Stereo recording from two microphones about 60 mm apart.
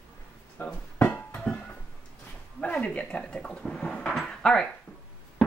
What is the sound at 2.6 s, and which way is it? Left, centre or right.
Speech, left.